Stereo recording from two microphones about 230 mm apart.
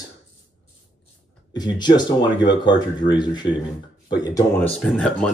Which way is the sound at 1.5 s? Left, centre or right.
Centre.